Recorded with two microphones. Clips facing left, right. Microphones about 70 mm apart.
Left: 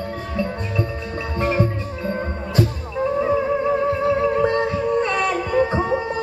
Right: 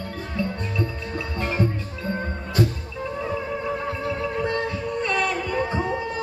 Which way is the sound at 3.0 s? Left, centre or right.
Left.